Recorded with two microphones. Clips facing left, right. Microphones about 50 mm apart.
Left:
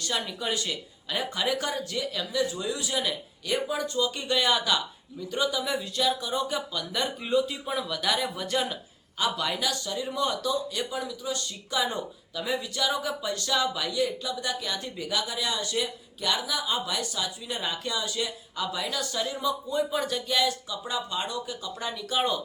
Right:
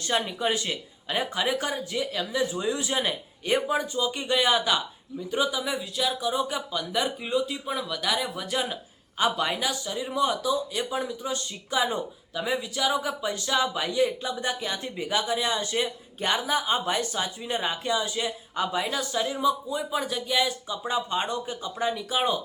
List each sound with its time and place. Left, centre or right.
0.0 s a man's voice: right
3.9 s speech: centre
9.1 s speech: right
10.9 s a man's voice: right